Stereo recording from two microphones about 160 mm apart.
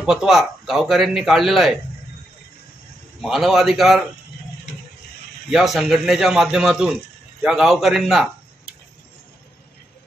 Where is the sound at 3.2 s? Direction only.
Centre (ahead or behind).